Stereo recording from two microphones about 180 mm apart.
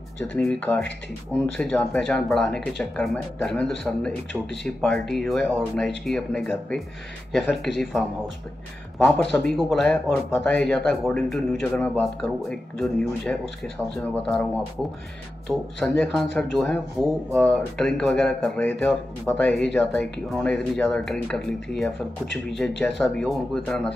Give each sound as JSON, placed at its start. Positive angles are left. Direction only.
{"t": 0.4, "sound": "speech", "side_deg": 10}